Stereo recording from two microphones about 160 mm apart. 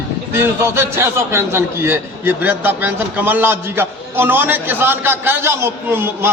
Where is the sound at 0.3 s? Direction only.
15° right (ahead or behind).